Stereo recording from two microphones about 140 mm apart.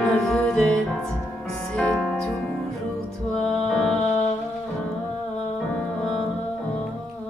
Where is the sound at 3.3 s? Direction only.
5° left (ahead or behind).